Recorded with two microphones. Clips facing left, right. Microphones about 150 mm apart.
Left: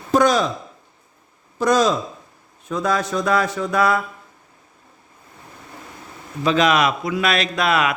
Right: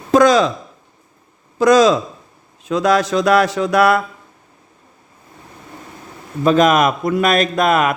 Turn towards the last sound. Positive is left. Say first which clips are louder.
# right 4 dB
turn(degrees=-45)  # may be behind; listen again after turning